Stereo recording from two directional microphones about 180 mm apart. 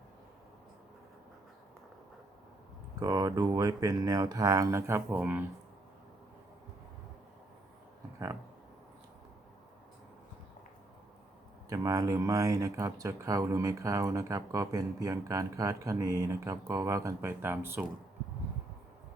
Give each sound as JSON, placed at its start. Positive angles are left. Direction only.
{"t": 3.0, "sound": "speech", "side_deg": -20}
{"t": 11.7, "sound": "speech", "side_deg": -20}